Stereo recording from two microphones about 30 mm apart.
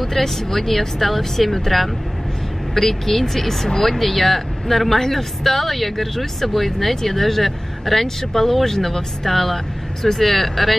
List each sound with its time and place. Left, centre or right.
0.0 s speech: centre